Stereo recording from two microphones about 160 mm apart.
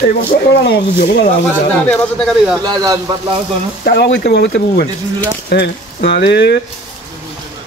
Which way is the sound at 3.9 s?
90° left.